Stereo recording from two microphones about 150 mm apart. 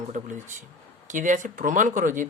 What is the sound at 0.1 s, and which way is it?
Speech, 55° right (ahead or behind).